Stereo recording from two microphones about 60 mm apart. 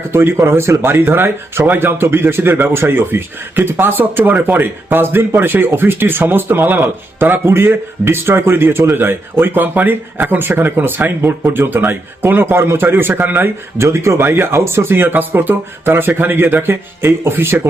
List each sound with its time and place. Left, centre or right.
0.1 s speech: right
13.7 s speech: right